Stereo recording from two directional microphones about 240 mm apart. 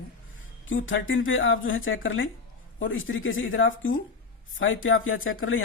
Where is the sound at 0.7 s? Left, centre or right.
Left.